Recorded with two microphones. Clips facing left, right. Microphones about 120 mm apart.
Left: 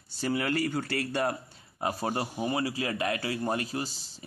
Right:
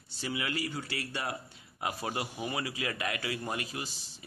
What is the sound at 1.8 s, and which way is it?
A man's voice, 35° left (ahead or behind).